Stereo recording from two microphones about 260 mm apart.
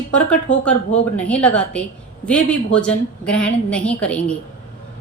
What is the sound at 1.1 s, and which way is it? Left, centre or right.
A woman's voice, centre.